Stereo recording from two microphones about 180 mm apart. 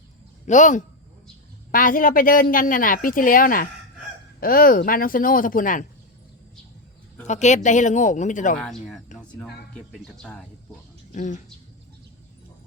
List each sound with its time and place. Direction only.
0.4 s a woman's voice: 45° left (ahead or behind)
7.3 s a woman's voice: 40° left (ahead or behind)
8.5 s speech: 5° left (ahead or behind)
11.1 s a woman's voice: 40° left (ahead or behind)